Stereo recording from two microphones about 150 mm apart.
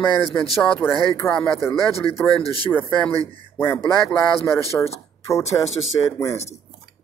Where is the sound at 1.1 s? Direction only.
20° left (ahead or behind).